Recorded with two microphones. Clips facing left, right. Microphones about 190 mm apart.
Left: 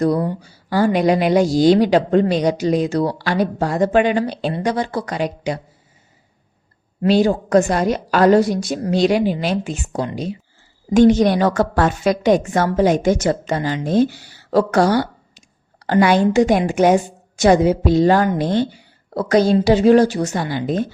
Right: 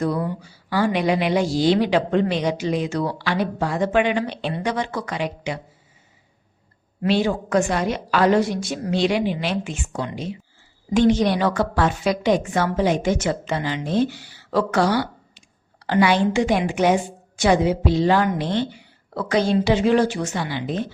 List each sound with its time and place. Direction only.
0.0 s a woman's voice: 40° left (ahead or behind)
7.0 s a woman's voice: 40° left (ahead or behind)